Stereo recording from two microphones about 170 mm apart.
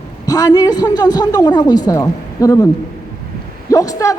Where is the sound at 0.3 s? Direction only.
20° left (ahead or behind).